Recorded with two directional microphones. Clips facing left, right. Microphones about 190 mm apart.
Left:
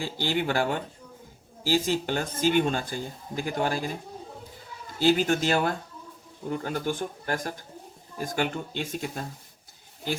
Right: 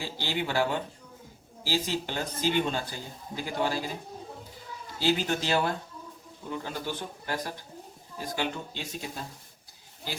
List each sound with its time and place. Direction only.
0.0 s speech: 50° left (ahead or behind)
4.9 s speech: 50° left (ahead or behind)